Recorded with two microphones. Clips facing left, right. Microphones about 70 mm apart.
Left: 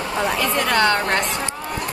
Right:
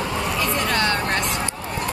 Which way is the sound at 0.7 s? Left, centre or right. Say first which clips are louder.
Left 4 dB; left.